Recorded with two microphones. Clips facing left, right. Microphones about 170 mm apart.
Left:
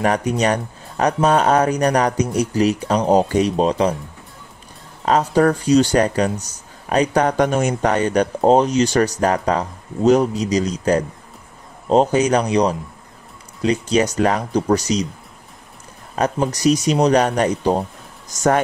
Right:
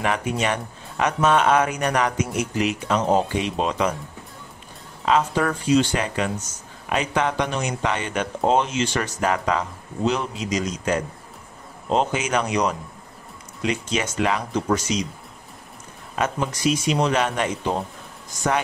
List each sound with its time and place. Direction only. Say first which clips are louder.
0.0 s speech: left 5 dB; 40° left (ahead or behind)
5.0 s speech: left 5 dB; 40° left (ahead or behind)
16.2 s speech: left 5 dB; 40° left (ahead or behind)